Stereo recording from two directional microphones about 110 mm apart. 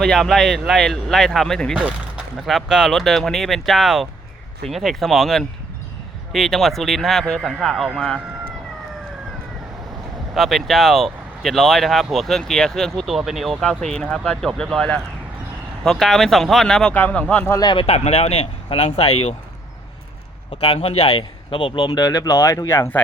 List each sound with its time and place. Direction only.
0.0 s speech: 5° left (ahead or behind)
1.7 s speech: 10° right (ahead or behind); by 8.2 s 5° left (ahead or behind)
10.3 s speech: centre (ahead or behind)
17.5 s speech: 35° left (ahead or behind)
17.7 s speech: 70° left (ahead or behind)
20.5 s a man's voice: 55° left (ahead or behind); by 22.9 s 30° left (ahead or behind)